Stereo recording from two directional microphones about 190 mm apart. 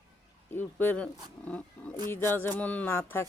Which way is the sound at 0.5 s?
10° left (ahead or behind).